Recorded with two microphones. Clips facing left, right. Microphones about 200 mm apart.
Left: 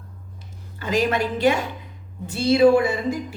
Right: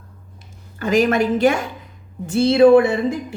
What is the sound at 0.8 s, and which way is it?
A woman's voice, 50° right (ahead or behind).